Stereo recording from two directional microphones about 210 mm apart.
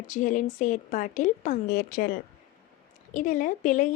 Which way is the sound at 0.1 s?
35° left (ahead or behind).